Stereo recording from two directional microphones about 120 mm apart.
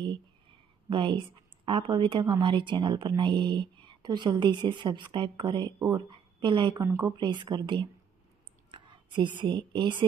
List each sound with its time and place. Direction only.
0.0 s a sound: 40° right (ahead or behind)
2.4 s speech: 40° right (ahead or behind)
6.9 s speech: 25° right (ahead or behind)
7.2 s a woman's voice: 40° right (ahead or behind)